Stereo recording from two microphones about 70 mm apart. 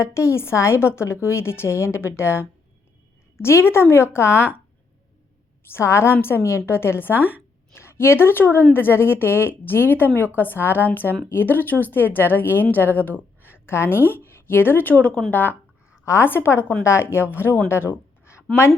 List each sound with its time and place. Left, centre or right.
0.0 s a woman's voice: left
5.6 s a woman's voice: left
17.7 s a sound: left